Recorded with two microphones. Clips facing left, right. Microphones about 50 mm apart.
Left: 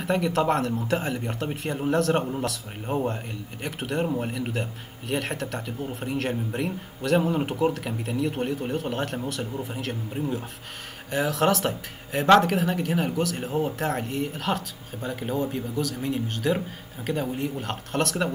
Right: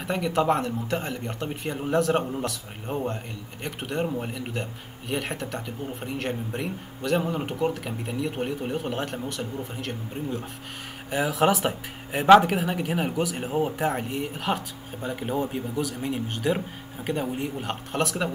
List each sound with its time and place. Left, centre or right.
0.0 s speech: centre
11.1 s speech: centre